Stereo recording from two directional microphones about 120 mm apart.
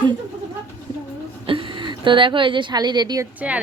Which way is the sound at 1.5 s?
45° right (ahead or behind).